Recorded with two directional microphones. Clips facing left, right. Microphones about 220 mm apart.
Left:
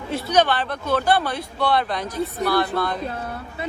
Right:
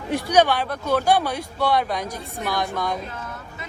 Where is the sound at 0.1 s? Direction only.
10° right (ahead or behind).